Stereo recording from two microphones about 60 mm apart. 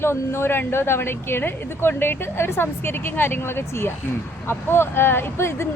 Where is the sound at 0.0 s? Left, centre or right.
Left.